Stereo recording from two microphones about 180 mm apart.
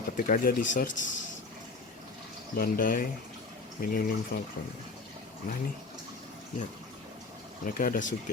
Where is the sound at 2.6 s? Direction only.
55° left (ahead or behind).